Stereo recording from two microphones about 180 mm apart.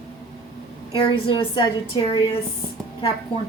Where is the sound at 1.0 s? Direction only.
30° left (ahead or behind).